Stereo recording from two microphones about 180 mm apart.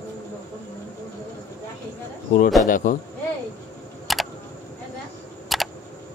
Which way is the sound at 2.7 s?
45° left (ahead or behind).